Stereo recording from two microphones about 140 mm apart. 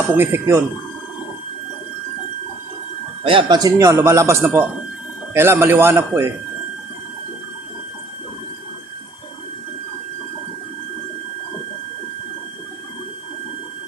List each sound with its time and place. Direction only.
0.2 s speech: 15° right (ahead or behind)
3.2 s speech: 40° right (ahead or behind)
3.6 s a man's voice: 25° right (ahead or behind)